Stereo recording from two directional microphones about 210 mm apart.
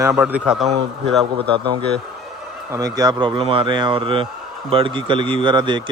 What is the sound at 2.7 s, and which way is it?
Speech, 15° right (ahead or behind).